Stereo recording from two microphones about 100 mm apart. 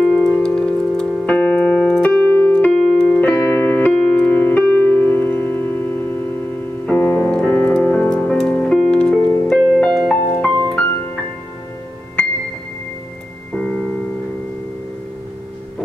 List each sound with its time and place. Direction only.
0.0 s keyboard: 15° left (ahead or behind)
6.9 s music: 15° left (ahead or behind)